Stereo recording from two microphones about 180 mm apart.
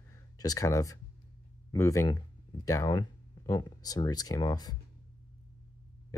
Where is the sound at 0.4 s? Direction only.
20° left (ahead or behind).